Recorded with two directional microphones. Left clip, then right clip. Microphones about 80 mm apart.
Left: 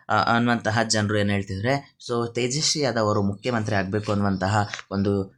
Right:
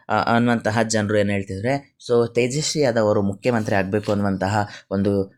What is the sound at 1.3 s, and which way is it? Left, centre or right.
Speech, right.